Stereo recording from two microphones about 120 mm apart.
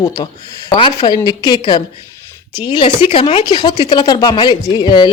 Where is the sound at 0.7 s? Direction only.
45° left (ahead or behind).